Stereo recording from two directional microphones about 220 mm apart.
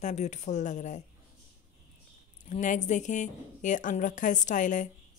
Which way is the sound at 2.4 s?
35° left (ahead or behind).